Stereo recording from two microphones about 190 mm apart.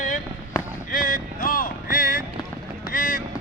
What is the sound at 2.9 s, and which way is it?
Vehicle, 45° left (ahead or behind).